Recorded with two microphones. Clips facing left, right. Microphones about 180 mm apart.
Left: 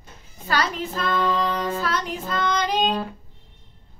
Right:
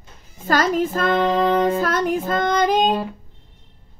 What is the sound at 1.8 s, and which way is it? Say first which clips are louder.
Music: right 7 dB; 50° right (ahead or behind).